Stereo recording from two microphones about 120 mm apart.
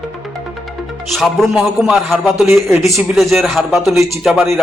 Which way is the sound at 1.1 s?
Centre (ahead or behind).